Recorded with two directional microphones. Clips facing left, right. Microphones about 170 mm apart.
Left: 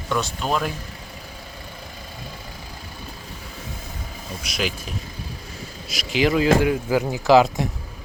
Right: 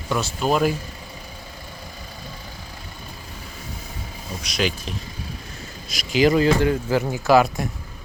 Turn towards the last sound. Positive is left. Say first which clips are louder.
# left 1 dB
turn(degrees=15)  # may be behind; listen again after turning